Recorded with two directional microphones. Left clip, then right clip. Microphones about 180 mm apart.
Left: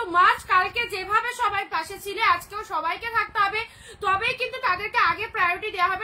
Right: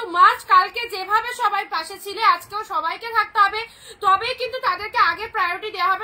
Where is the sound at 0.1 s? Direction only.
10° left (ahead or behind).